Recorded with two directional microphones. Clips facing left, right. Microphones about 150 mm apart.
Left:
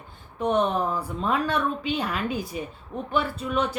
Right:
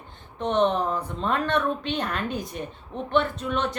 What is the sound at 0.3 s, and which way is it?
A woman's voice, 5° left (ahead or behind).